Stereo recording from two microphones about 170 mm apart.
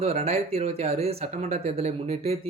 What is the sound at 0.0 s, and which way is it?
A man's voice, 40° right (ahead or behind).